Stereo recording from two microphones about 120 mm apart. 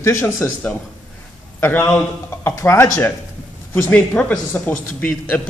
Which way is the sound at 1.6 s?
20° left (ahead or behind).